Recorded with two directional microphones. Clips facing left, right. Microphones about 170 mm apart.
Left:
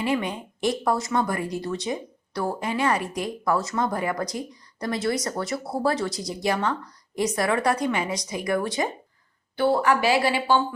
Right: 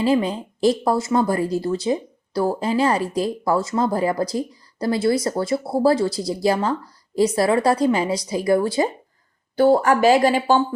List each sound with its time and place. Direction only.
0.0 s a woman's voice: 30° right (ahead or behind)
9.6 s speech: 40° right (ahead or behind)